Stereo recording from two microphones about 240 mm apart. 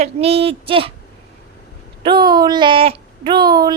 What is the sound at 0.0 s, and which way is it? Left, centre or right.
Speech, right.